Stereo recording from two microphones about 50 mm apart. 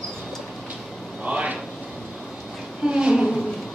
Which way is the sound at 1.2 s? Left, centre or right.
Right.